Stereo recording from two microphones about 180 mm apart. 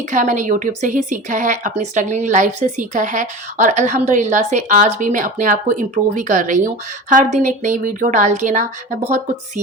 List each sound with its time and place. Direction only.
0.1 s a woman's voice: 45° right (ahead or behind)